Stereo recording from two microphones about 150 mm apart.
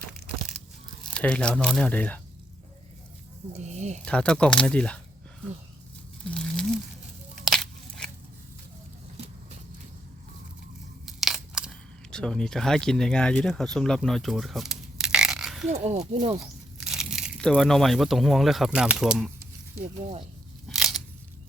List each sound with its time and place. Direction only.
1.1 s speech: 5° left (ahead or behind)
3.5 s speech: 50° right (ahead or behind)
4.0 s speech: 5° left (ahead or behind)
6.2 s crumpling: 5° left (ahead or behind)
7.3 s a sound: 5° left (ahead or behind)
9.1 s vehicle: 45° right (ahead or behind)
11.0 s crunch: centre (ahead or behind)
12.1 s speech: 5° left (ahead or behind)
15.7 s speech: 40° right (ahead or behind)
16.8 s a sound: 5° right (ahead or behind)
17.5 s speech: centre (ahead or behind)
20.7 s a sound: centre (ahead or behind)